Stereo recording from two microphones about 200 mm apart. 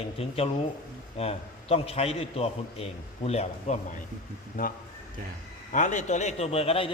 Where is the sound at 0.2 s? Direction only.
30° left (ahead or behind).